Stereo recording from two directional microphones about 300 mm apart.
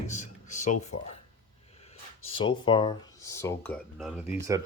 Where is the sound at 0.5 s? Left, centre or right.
Left.